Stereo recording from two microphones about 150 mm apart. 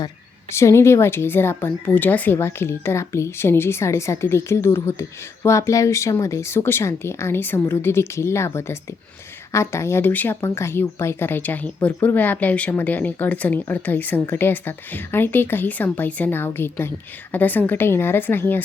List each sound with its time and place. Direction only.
0.5 s speech: 20° left (ahead or behind)